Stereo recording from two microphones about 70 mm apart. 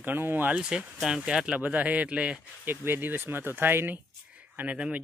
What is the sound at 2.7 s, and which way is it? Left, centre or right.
Speech, right.